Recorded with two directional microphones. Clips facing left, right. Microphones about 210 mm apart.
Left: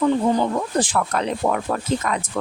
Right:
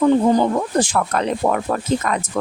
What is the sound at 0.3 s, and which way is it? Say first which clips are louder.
Speech: right 3 dB; 45° right (ahead or behind).